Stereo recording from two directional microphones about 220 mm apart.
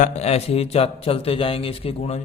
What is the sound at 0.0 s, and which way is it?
Speech, 30° left (ahead or behind).